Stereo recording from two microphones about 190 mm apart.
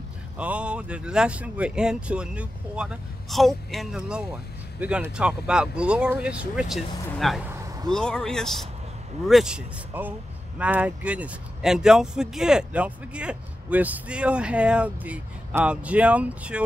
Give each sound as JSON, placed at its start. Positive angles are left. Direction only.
{"t": 0.4, "sound": "speech", "side_deg": -5}
{"t": 7.5, "sound": "a sound", "side_deg": -20}
{"t": 7.9, "sound": "speech", "side_deg": 5}